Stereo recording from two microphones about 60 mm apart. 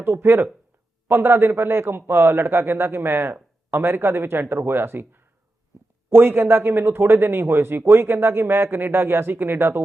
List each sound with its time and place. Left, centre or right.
0.0 s a man's voice: right